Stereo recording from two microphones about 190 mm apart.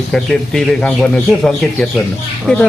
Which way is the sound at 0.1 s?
5° left (ahead or behind).